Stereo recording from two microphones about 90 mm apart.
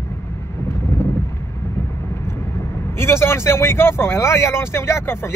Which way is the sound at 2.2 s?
30° left (ahead or behind).